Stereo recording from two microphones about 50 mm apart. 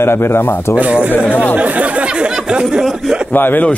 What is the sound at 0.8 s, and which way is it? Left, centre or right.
Speech, right.